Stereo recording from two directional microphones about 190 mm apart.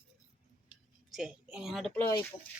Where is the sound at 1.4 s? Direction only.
5° right (ahead or behind).